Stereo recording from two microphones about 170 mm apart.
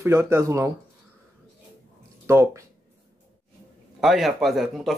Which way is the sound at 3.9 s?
Centre (ahead or behind).